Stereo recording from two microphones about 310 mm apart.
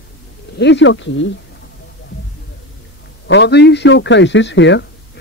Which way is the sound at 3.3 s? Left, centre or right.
Left.